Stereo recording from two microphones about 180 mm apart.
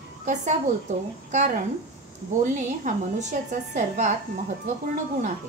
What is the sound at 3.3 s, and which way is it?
Speech, 40° right (ahead or behind).